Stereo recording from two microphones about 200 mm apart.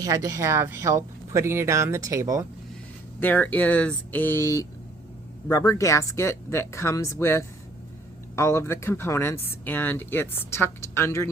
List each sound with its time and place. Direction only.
0.0 s speech: 15° right (ahead or behind)
3.2 s speech: 10° left (ahead or behind)